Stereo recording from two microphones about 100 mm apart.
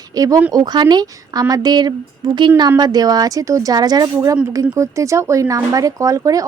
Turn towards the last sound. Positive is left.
turn(degrees=-35)  # may be behind; listen again after turning